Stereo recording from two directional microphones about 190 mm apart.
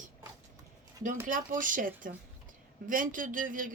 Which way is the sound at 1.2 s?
45° right (ahead or behind).